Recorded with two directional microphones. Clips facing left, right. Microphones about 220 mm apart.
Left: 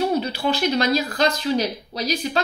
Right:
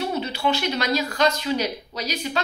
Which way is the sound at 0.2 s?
35° left (ahead or behind).